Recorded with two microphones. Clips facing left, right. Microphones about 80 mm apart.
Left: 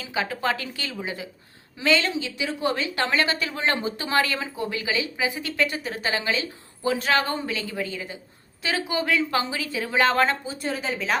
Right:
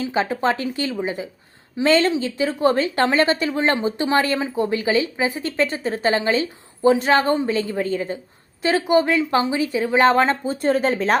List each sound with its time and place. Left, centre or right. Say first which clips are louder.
0.0 s a woman's voice: right 6 dB; right
1.8 s a woman's voice: right 6 dB; right
8.6 s a woman's voice: right 9 dB; right
10.5 s speech: right 9 dB; right